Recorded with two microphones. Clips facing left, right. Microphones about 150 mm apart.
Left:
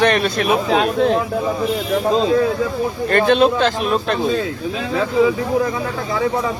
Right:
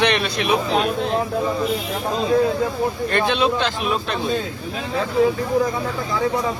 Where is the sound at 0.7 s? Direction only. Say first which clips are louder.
Left 5 dB; 90° left.